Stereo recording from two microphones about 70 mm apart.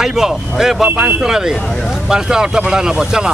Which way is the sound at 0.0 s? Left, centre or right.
Centre.